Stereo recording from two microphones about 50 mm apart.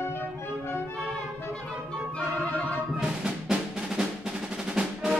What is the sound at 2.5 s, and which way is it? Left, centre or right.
Music, left.